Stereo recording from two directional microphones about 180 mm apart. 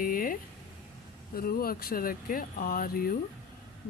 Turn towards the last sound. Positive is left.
turn(degrees=55)  # may be behind; listen again after turning